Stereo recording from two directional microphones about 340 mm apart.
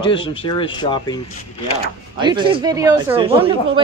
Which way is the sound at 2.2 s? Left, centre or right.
Centre.